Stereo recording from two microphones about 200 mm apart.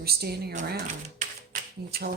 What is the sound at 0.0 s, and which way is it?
Speech, 50° right (ahead or behind).